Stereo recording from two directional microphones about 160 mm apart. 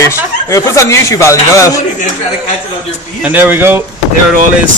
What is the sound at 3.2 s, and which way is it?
Speech, 10° right (ahead or behind).